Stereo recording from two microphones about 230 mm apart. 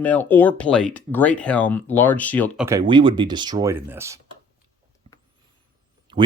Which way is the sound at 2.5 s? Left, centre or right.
Centre.